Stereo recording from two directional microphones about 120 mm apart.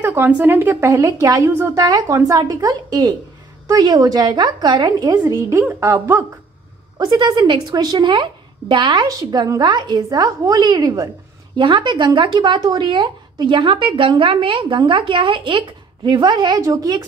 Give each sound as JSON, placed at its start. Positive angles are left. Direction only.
{"t": 0.0, "sound": "a woman's voice", "side_deg": -20}
{"t": 1.9, "sound": "speech", "side_deg": -35}
{"t": 7.1, "sound": "speech", "side_deg": -40}
{"t": 11.5, "sound": "speech", "side_deg": -40}